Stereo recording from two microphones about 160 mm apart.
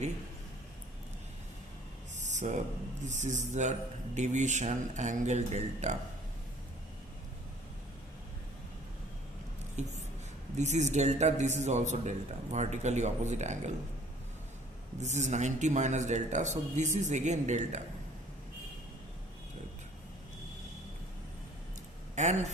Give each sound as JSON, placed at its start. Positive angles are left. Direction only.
{"t": 2.2, "sound": "a sound", "side_deg": -50}
{"t": 3.0, "sound": "speech", "side_deg": -50}
{"t": 9.8, "sound": "speech", "side_deg": -45}
{"t": 15.0, "sound": "speech", "side_deg": -45}
{"t": 22.1, "sound": "speech", "side_deg": -45}